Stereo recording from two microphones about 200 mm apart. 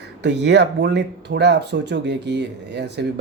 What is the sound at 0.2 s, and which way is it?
Speech, 60° right (ahead or behind).